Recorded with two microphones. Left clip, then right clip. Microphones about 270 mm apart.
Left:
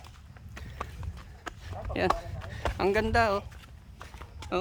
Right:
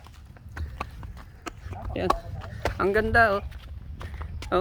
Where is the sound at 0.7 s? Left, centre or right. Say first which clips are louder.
Right 3 dB; right.